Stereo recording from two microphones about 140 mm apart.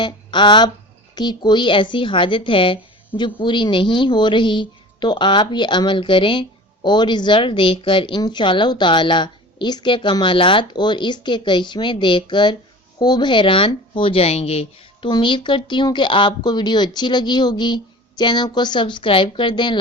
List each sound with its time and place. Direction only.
0.0 s speech: 35° left (ahead or behind)
15.1 s speech: 35° left (ahead or behind)